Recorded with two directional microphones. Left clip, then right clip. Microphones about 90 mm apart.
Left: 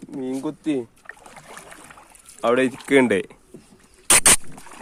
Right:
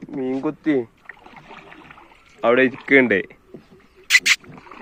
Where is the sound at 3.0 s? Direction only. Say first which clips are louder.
Right 2 dB; 60° left (ahead or behind).